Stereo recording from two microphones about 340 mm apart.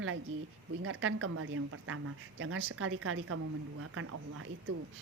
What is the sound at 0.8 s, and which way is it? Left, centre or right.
Speech, right.